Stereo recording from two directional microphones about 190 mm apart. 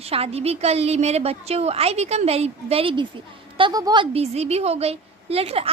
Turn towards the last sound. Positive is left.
turn(degrees=-30)  # may be behind; listen again after turning